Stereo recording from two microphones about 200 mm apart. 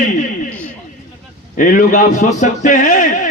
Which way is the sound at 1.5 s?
40° left (ahead or behind).